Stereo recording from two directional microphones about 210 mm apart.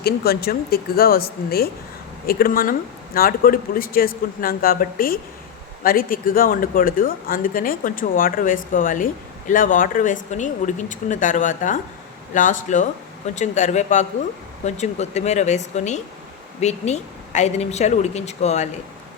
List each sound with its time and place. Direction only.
0.0 s a man's voice: 45° left (ahead or behind)